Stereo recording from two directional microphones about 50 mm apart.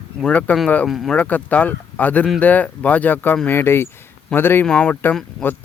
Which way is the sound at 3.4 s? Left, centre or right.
Left.